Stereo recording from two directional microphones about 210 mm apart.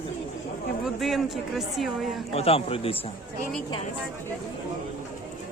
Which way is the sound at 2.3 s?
30° left (ahead or behind).